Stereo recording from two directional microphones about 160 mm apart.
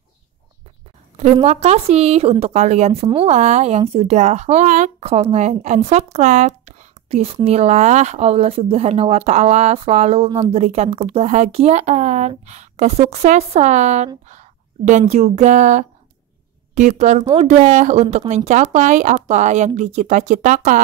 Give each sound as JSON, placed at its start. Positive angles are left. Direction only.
{"t": 1.1, "sound": "a woman's voice", "side_deg": -45}